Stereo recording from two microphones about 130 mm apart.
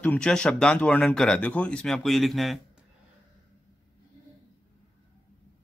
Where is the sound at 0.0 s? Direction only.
10° left (ahead or behind).